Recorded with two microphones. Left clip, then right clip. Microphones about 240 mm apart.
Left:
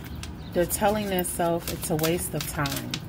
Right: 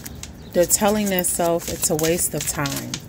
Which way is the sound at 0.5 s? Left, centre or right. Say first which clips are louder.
Right 5 dB; right.